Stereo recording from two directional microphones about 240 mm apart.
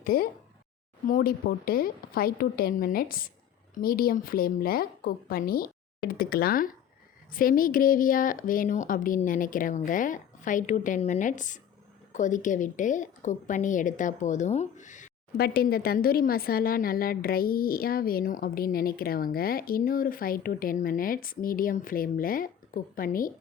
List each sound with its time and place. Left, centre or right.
0.0 s a woman's voice: left